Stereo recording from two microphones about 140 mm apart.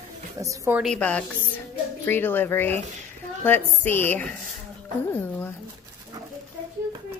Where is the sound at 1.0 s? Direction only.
10° left (ahead or behind).